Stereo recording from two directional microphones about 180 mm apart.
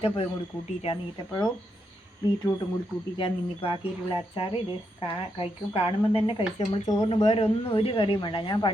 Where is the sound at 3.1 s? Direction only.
25° left (ahead or behind).